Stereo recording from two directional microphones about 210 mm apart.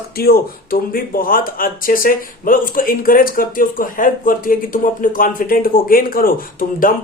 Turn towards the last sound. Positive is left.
turn(degrees=40)  # may be behind; listen again after turning